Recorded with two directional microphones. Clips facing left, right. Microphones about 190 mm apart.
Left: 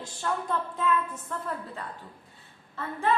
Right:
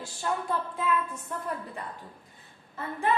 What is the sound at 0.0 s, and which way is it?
A woman's voice, 10° right (ahead or behind).